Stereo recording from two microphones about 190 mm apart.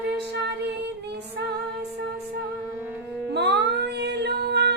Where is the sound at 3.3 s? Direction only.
60° right (ahead or behind).